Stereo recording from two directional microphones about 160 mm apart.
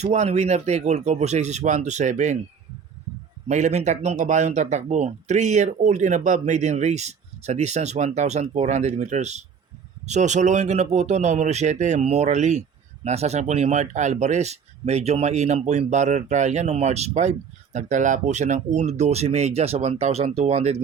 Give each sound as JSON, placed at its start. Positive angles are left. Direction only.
{"t": 0.0, "sound": "speech", "side_deg": -45}
{"t": 3.5, "sound": "speech", "side_deg": -45}